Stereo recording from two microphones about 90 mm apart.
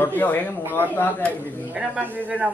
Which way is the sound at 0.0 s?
20° left (ahead or behind).